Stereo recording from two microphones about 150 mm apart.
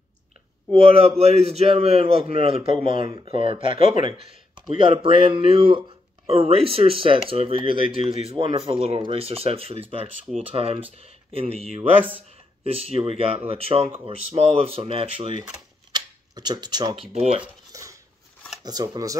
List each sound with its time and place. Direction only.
0.7 s speech: 40° right (ahead or behind)
15.9 s speech: 25° right (ahead or behind); by 17.4 s 45° right (ahead or behind)
18.6 s speech: 25° right (ahead or behind)